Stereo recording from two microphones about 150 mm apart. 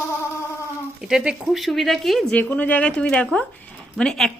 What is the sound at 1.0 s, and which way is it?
A woman's voice, 5° right (ahead or behind).